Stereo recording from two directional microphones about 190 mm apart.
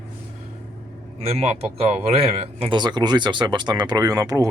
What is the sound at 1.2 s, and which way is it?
Speech, 30° right (ahead or behind).